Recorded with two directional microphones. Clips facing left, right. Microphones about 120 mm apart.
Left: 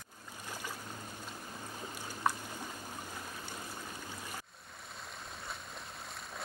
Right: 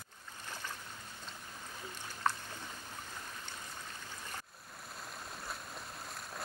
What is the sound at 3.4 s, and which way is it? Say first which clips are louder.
Stream: left 3 dB; 10° left (ahead or behind).